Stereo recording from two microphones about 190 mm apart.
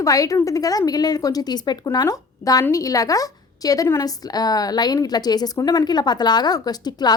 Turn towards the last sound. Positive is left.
turn(degrees=20)  # may be behind; listen again after turning